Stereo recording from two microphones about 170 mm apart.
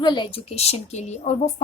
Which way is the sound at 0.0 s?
25° left (ahead or behind).